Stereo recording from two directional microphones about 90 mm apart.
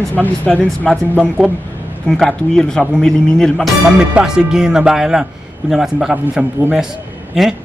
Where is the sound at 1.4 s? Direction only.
5° right (ahead or behind).